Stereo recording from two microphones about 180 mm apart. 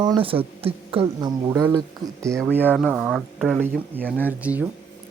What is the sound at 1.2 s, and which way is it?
Speech, 20° right (ahead or behind).